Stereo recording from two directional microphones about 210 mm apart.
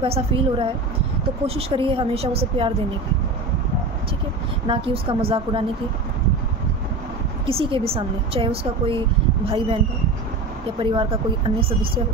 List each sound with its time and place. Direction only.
0.0 s speech: 25° right (ahead or behind)
4.6 s speech: 25° right (ahead or behind)
7.4 s speech: 25° right (ahead or behind)
10.8 s speech: 25° right (ahead or behind)